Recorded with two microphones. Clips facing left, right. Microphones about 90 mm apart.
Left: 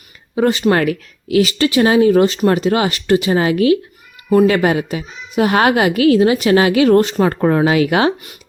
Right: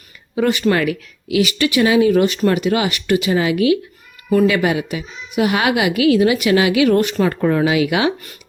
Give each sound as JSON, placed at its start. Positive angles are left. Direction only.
{"t": 0.3, "sound": "speech", "side_deg": 30}
{"t": 0.7, "sound": "a child's voice", "side_deg": 40}